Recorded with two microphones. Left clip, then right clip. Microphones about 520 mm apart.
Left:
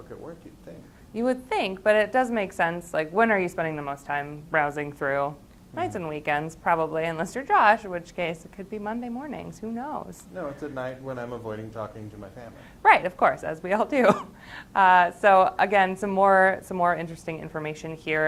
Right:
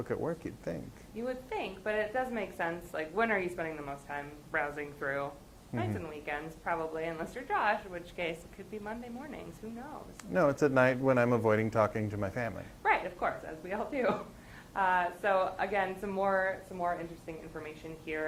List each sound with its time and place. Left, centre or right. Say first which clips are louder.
1.1 s a woman's voice: left 11 dB; left
10.3 s speech: right 7 dB; right
12.8 s a woman's voice: left 12 dB; left